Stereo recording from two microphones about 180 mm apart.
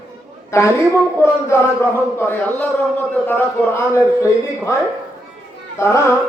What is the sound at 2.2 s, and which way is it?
Speech, 10° left (ahead or behind).